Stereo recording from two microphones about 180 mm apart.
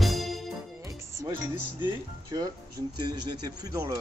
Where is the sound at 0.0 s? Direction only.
Centre (ahead or behind).